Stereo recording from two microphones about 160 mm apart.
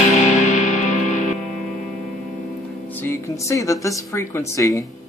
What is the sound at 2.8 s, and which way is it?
A woman's voice, 15° left (ahead or behind).